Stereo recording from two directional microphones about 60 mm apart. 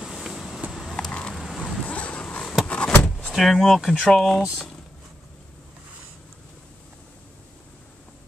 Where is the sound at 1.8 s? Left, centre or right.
Left.